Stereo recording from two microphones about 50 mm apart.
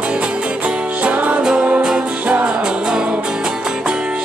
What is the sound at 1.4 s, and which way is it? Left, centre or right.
Music, centre.